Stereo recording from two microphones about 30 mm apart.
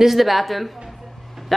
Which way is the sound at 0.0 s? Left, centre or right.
Centre.